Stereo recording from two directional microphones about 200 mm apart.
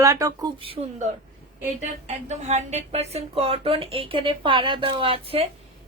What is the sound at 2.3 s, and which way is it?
Speech, 35° right (ahead or behind).